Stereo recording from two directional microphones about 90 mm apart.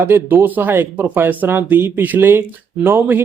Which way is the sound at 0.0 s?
25° right (ahead or behind).